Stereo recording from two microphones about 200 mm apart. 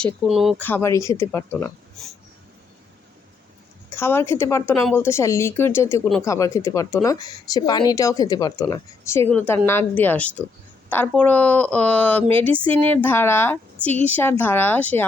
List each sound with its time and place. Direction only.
0.3 s speech: centre (ahead or behind)
0.6 s speech: 10° left (ahead or behind)
3.9 s speech: 10° left (ahead or behind)